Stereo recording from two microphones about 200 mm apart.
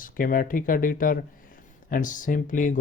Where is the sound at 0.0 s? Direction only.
45° left (ahead or behind).